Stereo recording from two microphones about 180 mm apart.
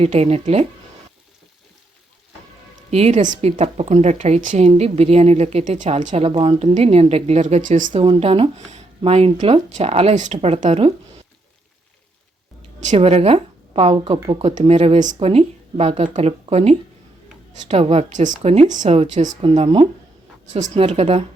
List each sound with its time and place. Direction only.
0.0 s a woman's voice: 35° right (ahead or behind)
2.9 s a woman's voice: 40° right (ahead or behind)
8.0 s a woman's voice: 30° right (ahead or behind)
12.8 s a woman's voice: 40° right (ahead or behind)